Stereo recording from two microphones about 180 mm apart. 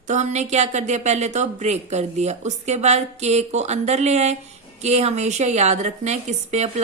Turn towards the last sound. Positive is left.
turn(degrees=-40)  # may be behind; listen again after turning